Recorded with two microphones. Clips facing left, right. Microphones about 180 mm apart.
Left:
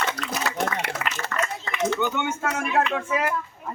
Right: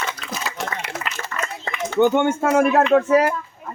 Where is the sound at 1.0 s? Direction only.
65° left (ahead or behind).